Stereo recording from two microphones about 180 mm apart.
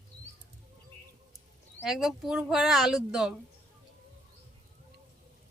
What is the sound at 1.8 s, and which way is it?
Speech, centre (ahead or behind).